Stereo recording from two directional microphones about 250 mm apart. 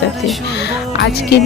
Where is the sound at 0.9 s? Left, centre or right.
Left.